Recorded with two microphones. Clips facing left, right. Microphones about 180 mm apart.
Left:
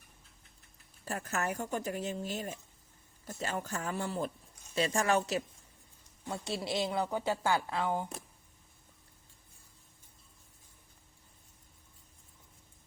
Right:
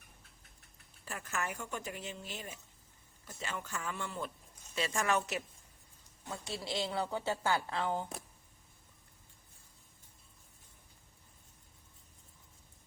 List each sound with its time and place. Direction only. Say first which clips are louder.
1.0 s speech: left 5 dB; 40° left (ahead or behind); by 8.0 s 15° left (ahead or behind)